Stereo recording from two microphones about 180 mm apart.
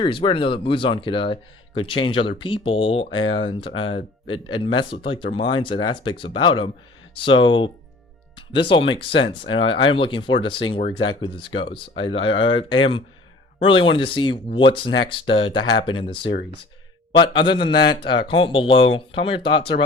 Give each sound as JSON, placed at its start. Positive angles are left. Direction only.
{"t": 0.0, "sound": "speech", "side_deg": 30}
{"t": 8.7, "sound": "speech", "side_deg": 30}